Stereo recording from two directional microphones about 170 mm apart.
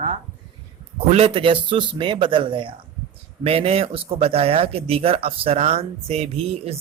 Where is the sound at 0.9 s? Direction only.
35° right (ahead or behind).